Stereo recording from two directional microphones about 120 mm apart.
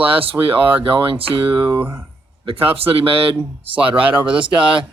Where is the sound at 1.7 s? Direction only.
15° right (ahead or behind).